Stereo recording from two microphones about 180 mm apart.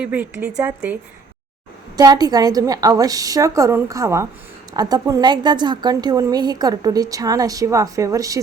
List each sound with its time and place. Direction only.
0.0 s speech: 10° right (ahead or behind)
2.0 s a woman's voice: 20° right (ahead or behind)